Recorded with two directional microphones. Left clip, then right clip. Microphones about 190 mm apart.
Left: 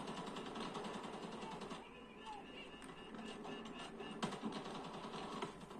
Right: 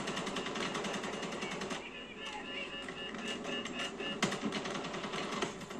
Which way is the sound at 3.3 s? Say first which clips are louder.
Right 11 dB; 25° right (ahead or behind).